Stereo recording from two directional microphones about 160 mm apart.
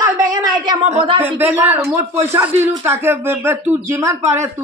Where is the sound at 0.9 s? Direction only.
35° right (ahead or behind).